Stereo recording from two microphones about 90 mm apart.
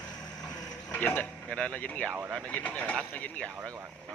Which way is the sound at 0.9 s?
20° left (ahead or behind).